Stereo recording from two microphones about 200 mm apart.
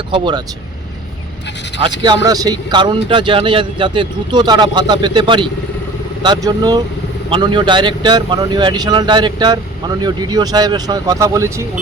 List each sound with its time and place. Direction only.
0.1 s a man's voice: 20° right (ahead or behind)
1.8 s a man's voice: 20° right (ahead or behind)